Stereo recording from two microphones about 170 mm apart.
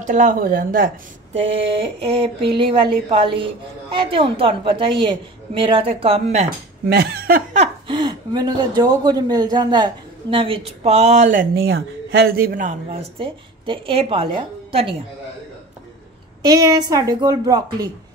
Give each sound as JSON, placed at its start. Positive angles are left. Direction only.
{"t": 0.0, "sound": "speech", "side_deg": -45}
{"t": 1.3, "sound": "speech", "side_deg": -35}
{"t": 6.9, "sound": "speech", "side_deg": -65}
{"t": 7.9, "sound": "speech", "side_deg": -25}
{"t": 12.9, "sound": "speech", "side_deg": -30}
{"t": 16.4, "sound": "a woman's voice", "side_deg": -20}